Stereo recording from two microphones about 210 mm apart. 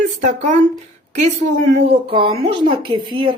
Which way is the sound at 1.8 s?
25° right (ahead or behind).